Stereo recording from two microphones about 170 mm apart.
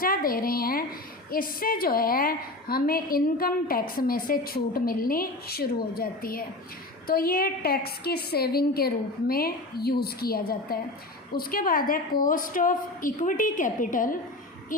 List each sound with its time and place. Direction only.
0.0 s a woman's voice: 55° left (ahead or behind)